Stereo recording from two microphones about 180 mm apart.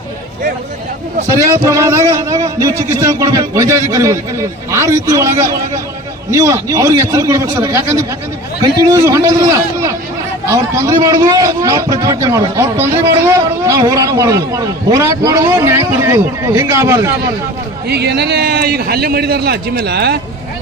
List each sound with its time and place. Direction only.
1.3 s a man's voice: 15° right (ahead or behind)
17.8 s a man's voice: 65° right (ahead or behind)